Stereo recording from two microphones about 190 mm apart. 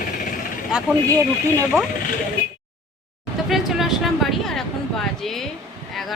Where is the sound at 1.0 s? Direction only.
15° right (ahead or behind).